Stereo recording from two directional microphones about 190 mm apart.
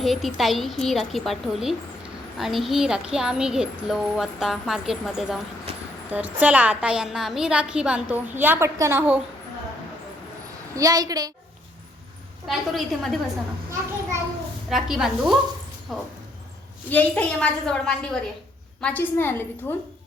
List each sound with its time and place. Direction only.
0.0 s a woman's voice: centre (ahead or behind)
10.8 s a woman's voice: 20° right (ahead or behind)
12.5 s speech: centre (ahead or behind)
14.7 s a woman's voice: centre (ahead or behind)